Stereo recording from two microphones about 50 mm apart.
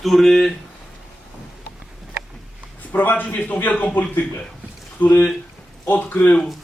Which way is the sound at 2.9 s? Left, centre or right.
Left.